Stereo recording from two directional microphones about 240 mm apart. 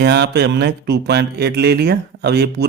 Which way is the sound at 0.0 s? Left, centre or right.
Right.